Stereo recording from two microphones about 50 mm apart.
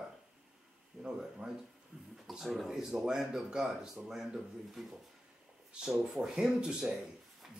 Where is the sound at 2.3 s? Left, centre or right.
Centre.